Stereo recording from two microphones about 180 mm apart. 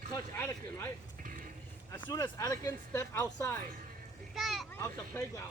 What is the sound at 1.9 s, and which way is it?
A child's voice, 20° left (ahead or behind).